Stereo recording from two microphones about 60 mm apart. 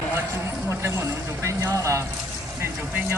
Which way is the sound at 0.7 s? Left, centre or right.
Right.